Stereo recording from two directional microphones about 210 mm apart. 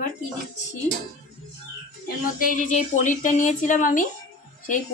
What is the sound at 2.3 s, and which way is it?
Speech, 40° left (ahead or behind).